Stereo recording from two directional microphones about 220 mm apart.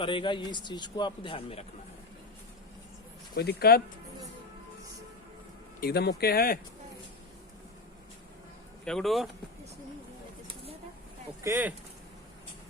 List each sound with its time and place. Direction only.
0.0 s speech: 20° left (ahead or behind)
3.3 s speech: 45° left (ahead or behind)
5.8 s speech: 45° left (ahead or behind)
8.8 s speech: centre (ahead or behind)
11.4 s speech: 10° right (ahead or behind)